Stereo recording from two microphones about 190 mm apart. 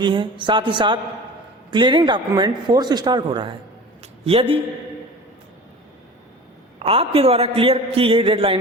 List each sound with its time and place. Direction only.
0.0 s a man's voice: 25° right (ahead or behind)
6.7 s a man's voice: 30° right (ahead or behind)